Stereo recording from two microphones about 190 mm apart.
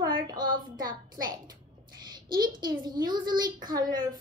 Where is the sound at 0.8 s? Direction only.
20° right (ahead or behind).